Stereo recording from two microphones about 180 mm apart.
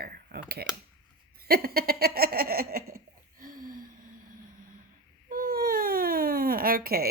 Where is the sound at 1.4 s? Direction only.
60° right (ahead or behind).